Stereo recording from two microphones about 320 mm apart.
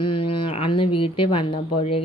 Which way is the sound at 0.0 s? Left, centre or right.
Centre.